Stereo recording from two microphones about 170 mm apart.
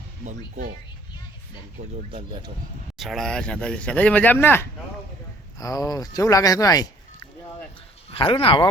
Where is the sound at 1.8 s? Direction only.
45° right (ahead or behind).